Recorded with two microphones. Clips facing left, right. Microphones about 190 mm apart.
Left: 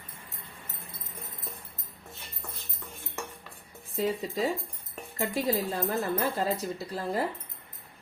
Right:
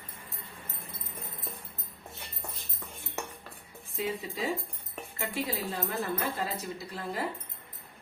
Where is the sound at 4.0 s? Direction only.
40° left (ahead or behind).